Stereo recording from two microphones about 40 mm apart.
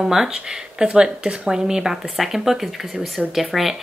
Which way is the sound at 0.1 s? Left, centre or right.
Centre.